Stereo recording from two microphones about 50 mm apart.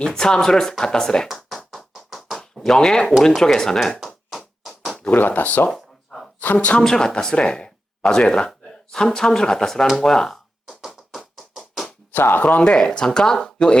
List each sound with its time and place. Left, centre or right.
0.0 s speech: centre
1.5 s a sound: centre
3.2 s speech: centre
4.3 s music: centre
5.1 s speech: left
5.7 s a sound: centre
6.4 s speech: left
6.8 s speech: centre
10.7 s music: centre
12.1 s speech: left
12.4 s speech: left
12.7 s speech: centre